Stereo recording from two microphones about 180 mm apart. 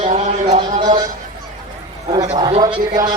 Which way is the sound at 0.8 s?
20° right (ahead or behind).